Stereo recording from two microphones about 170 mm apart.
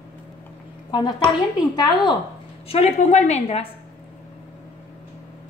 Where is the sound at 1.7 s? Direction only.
25° left (ahead or behind).